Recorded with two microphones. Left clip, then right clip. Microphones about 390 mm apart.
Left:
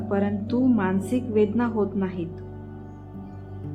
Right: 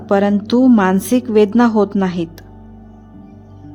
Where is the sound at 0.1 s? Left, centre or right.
Right.